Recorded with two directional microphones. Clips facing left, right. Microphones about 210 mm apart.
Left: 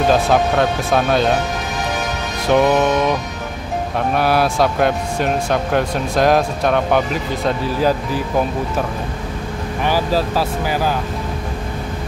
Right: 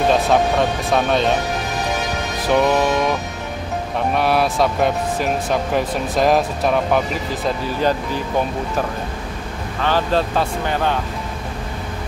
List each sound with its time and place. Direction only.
0.1 s speech: centre (ahead or behind)
2.4 s speech: centre (ahead or behind)
4.1 s speech: centre (ahead or behind)
9.8 s speech: 10° left (ahead or behind)